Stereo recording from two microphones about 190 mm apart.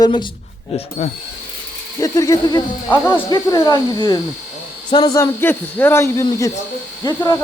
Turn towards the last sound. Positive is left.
turn(degrees=20)  # may be behind; listen again after turning